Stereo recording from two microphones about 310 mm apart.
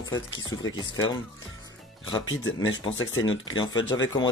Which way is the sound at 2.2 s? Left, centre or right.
Left.